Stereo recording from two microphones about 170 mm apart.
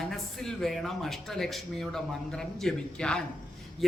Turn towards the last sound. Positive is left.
turn(degrees=5)  # may be behind; listen again after turning